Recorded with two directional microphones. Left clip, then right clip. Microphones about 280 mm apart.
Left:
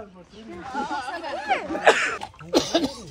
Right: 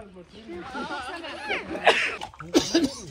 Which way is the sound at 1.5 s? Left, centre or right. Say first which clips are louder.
Left 3 dB; left.